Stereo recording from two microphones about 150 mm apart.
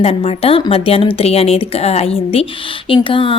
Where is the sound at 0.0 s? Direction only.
40° left (ahead or behind).